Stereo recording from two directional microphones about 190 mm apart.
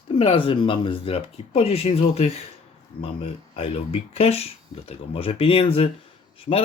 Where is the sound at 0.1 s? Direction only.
30° left (ahead or behind).